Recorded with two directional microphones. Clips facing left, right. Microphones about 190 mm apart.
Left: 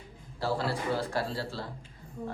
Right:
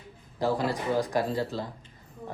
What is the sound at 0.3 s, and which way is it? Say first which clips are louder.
Speech: right 4 dB; 15° right (ahead or behind).